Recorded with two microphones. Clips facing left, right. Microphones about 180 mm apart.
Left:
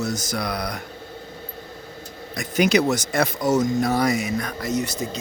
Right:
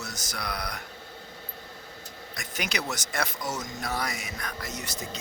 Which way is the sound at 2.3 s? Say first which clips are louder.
Left 15 dB; 10° left (ahead or behind).